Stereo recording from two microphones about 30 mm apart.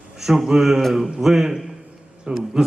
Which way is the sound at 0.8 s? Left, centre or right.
Centre.